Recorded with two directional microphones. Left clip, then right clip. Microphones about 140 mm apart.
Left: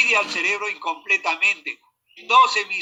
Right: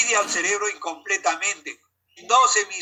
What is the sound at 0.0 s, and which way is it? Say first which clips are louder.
Speech: left 3 dB; 70° right (ahead or behind).